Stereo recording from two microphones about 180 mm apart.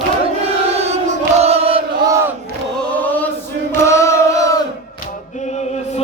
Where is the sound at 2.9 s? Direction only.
10° left (ahead or behind).